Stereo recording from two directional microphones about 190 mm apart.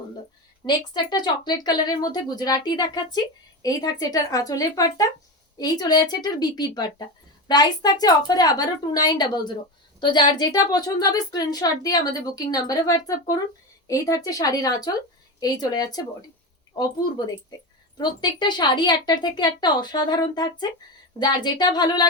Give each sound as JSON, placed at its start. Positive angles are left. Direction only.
{"t": 0.6, "sound": "speech", "side_deg": 20}
{"t": 17.9, "sound": "speech", "side_deg": 20}